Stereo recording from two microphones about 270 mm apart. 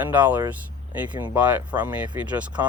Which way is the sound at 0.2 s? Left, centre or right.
Centre.